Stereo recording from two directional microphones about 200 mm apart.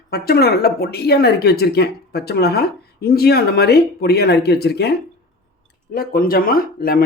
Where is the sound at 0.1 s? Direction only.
50° left (ahead or behind).